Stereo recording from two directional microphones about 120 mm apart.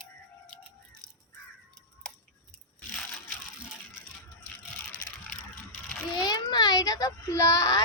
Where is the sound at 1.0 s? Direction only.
30° right (ahead or behind).